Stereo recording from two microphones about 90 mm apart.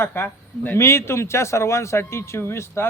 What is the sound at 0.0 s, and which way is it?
A man's voice, 25° left (ahead or behind).